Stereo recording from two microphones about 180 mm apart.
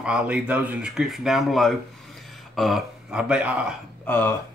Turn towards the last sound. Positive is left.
turn(degrees=10)  # may be behind; listen again after turning